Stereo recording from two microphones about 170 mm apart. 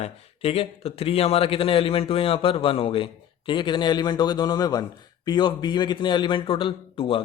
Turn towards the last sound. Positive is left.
turn(degrees=35)  # may be behind; listen again after turning